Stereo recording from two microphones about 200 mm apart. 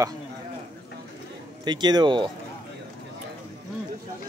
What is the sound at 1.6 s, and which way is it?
Speech, 20° right (ahead or behind).